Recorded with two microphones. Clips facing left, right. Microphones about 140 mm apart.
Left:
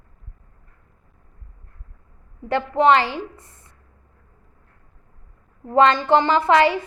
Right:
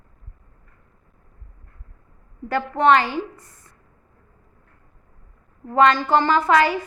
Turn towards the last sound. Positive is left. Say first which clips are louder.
# left 1 dB
turn(degrees=25)  # may be behind; listen again after turning